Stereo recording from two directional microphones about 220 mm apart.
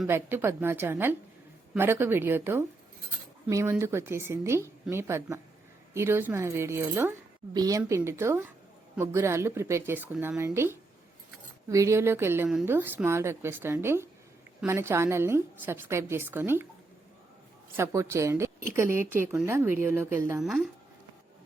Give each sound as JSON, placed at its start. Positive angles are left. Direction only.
{"t": 0.0, "sound": "a woman's voice", "side_deg": -10}
{"t": 17.7, "sound": "a woman's voice", "side_deg": -10}